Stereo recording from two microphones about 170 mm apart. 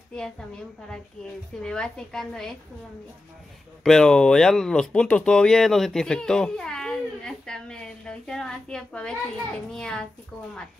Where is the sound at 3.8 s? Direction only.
5° left (ahead or behind).